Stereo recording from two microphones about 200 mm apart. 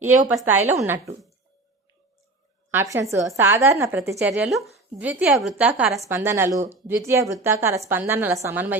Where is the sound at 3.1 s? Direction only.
15° right (ahead or behind).